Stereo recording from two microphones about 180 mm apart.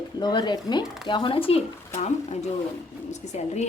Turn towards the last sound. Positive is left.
turn(degrees=40)  # may be behind; listen again after turning